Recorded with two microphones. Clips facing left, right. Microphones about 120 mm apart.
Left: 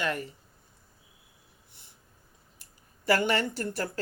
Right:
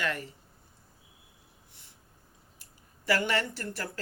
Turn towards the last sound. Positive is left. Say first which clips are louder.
# left 5 dB
turn(degrees=25)  # may be behind; listen again after turning